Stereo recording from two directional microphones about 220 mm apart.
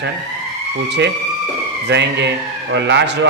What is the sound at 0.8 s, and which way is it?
A man's voice, 50° right (ahead or behind).